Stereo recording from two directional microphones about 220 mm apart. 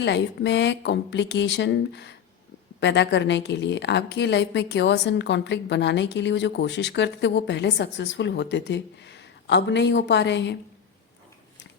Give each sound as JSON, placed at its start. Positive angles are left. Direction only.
{"t": 0.0, "sound": "a woman's voice", "side_deg": 50}